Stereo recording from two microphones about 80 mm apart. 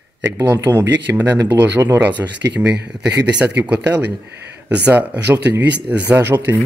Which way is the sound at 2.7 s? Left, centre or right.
Centre.